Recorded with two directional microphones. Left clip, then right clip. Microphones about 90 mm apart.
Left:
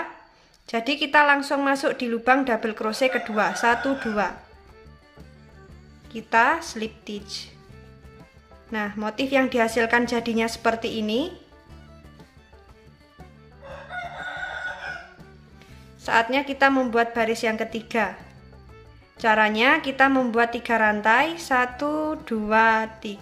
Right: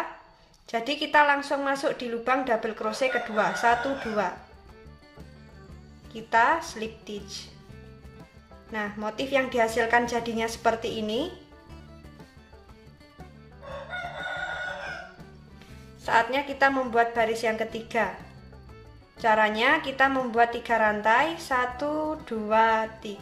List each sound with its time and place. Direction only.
0.7 s a woman's voice: 40° left (ahead or behind)
6.1 s a woman's voice: 40° left (ahead or behind)
8.7 s a woman's voice: 45° left (ahead or behind)
16.0 s a woman's voice: 35° left (ahead or behind)
19.1 s a woman's voice: 45° left (ahead or behind)